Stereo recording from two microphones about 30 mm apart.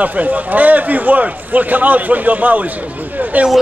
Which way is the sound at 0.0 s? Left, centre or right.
Right.